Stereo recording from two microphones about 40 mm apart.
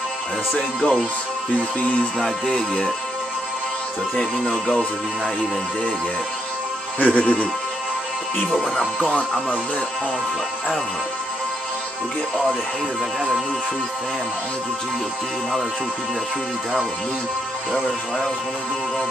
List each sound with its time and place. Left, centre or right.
0.6 s music: left
2.1 s music: centre
4.2 s music: centre
7.0 s speech: left